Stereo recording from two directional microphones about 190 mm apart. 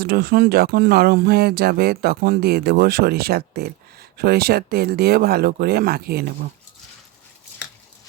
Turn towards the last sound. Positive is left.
turn(degrees=-55)  # may be behind; listen again after turning